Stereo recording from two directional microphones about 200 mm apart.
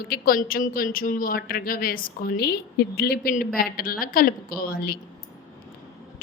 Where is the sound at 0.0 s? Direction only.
50° left (ahead or behind).